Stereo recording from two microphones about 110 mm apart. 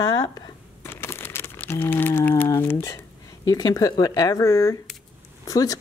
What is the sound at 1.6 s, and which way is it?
Speech, 20° left (ahead or behind).